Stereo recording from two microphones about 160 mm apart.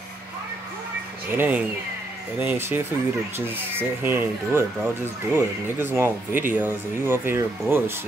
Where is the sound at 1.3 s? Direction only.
10° right (ahead or behind).